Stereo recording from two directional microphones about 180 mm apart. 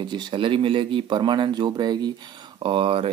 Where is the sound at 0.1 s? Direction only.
30° right (ahead or behind).